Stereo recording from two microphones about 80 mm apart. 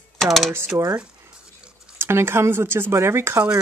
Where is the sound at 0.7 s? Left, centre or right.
Right.